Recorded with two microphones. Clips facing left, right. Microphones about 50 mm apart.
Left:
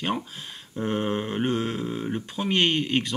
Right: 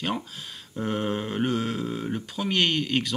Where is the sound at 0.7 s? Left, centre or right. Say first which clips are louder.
Left 1 dB; centre.